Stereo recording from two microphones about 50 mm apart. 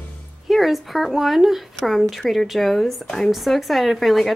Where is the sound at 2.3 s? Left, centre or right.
Centre.